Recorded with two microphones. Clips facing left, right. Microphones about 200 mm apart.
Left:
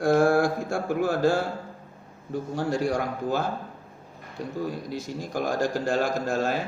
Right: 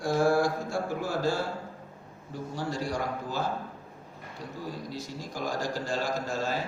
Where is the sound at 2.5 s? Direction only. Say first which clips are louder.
Left 6 dB; 55° left (ahead or behind).